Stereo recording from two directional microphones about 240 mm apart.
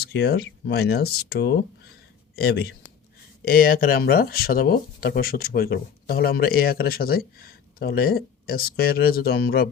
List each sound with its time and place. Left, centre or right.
0.0 s speech: left